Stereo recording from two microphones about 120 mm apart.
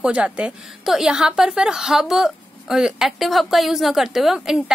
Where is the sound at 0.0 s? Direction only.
10° right (ahead or behind).